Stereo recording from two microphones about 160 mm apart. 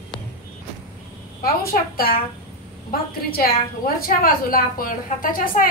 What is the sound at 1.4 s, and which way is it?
A woman's voice, 65° left (ahead or behind).